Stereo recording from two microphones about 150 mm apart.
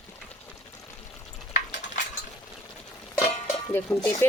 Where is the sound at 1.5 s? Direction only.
50° left (ahead or behind).